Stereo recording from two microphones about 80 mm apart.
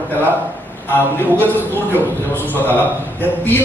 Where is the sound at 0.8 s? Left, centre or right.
Left.